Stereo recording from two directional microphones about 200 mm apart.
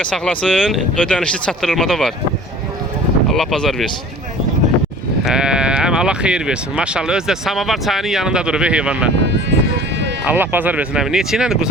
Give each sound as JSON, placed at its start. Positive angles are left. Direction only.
{"t": 0.0, "sound": "speech", "side_deg": 5}
{"t": 3.3, "sound": "speech", "side_deg": 0}
{"t": 5.2, "sound": "speech", "side_deg": -5}
{"t": 9.2, "sound": "a sound", "side_deg": -60}
{"t": 10.2, "sound": "speech", "side_deg": -10}